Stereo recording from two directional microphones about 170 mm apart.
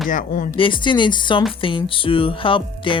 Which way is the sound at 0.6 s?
30° left (ahead or behind).